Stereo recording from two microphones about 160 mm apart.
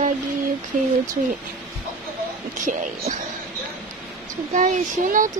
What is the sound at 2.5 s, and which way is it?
Speech, 50° right (ahead or behind).